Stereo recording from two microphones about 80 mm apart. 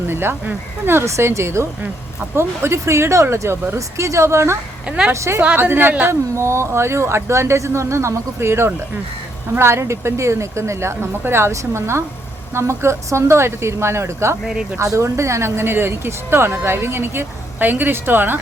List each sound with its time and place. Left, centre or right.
0.1 s speech: right
4.9 s a woman's voice: centre
5.1 s speech: right
5.5 s speech: right
6.3 s speech: right